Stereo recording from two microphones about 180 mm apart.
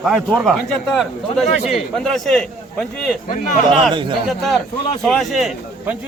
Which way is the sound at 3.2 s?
45° left (ahead or behind).